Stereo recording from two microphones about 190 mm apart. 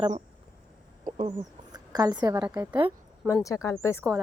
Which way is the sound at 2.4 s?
10° right (ahead or behind).